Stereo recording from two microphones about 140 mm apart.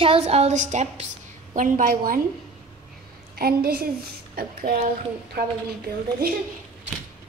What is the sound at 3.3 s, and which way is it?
Speech, 90° right.